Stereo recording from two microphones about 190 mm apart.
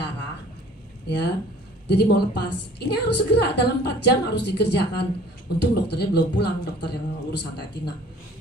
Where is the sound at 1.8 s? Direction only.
60° left (ahead or behind).